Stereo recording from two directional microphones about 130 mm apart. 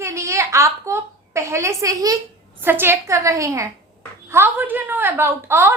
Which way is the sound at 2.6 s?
15° right (ahead or behind).